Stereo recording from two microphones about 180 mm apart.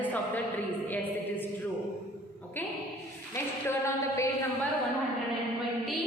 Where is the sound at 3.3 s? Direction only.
15° left (ahead or behind).